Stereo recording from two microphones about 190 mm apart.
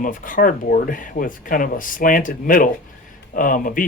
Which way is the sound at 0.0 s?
45° left (ahead or behind).